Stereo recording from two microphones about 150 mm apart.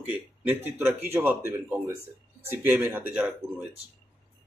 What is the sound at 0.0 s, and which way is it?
Speech, 10° right (ahead or behind).